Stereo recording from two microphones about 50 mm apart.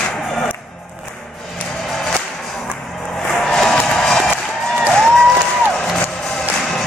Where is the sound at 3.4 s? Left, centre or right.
Centre.